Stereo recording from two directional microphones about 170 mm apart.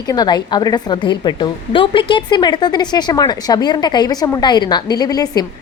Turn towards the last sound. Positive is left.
turn(degrees=20)  # may be behind; listen again after turning